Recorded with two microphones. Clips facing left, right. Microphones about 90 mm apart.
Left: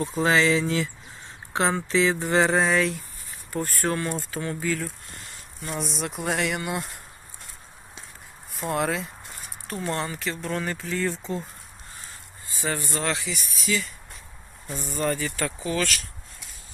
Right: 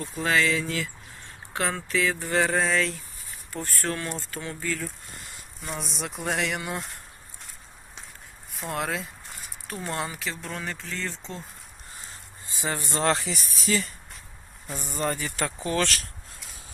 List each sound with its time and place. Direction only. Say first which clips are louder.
0.0 s a sound: left 3 dB; 25° left (ahead or behind)
1.9 s a sound: left 3 dB; 20° left (ahead or behind)
3.5 s speech: left 4 dB; 5° left (ahead or behind)
8.5 s speech: left 4 dB; centre (ahead or behind)
12.5 s speech: even; 20° right (ahead or behind); by 13.9 s 40° right (ahead or behind)
14.7 s speech: left 2 dB; 20° right (ahead or behind)
15.8 s speech: right 2 dB; 35° right (ahead or behind)